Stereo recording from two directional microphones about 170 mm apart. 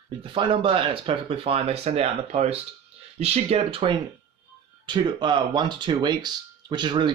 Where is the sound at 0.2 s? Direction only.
30° right (ahead or behind).